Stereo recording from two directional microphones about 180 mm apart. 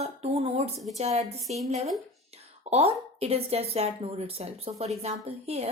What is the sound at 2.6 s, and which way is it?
A woman's voice, 35° right (ahead or behind).